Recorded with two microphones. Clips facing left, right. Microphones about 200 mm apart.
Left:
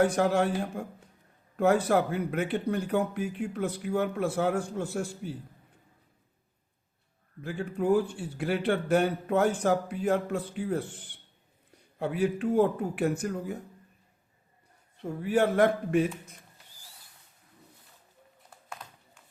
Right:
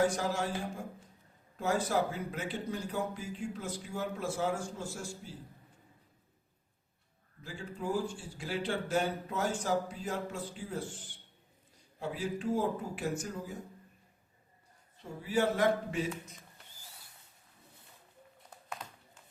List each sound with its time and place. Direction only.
0.0 s speech: 60° left (ahead or behind)
7.4 s speech: 60° left (ahead or behind)
15.0 s speech: 55° left (ahead or behind)